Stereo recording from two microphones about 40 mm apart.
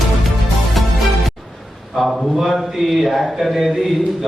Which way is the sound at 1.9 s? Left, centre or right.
Centre.